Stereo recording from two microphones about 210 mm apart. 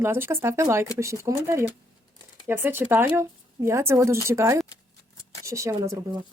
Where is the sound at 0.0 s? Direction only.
10° right (ahead or behind).